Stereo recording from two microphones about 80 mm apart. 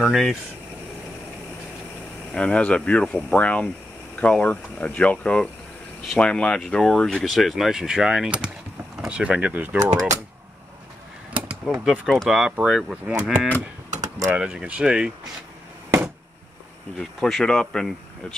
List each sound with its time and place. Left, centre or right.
0.0 s speech: centre
2.3 s speech: centre
9.8 s speech: right
11.9 s speech: centre
12.3 s mechanisms: centre
17.2 s speech: centre